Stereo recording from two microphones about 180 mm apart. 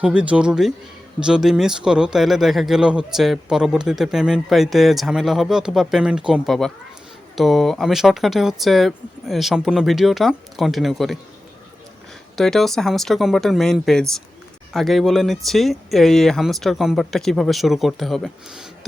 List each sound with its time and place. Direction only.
0.0 s speech: 5° right (ahead or behind)
12.4 s speech: centre (ahead or behind)